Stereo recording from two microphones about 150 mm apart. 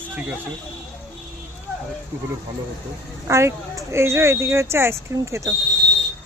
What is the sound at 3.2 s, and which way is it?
Speech, 20° right (ahead or behind).